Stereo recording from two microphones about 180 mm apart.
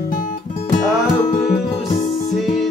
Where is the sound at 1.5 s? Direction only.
35° left (ahead or behind).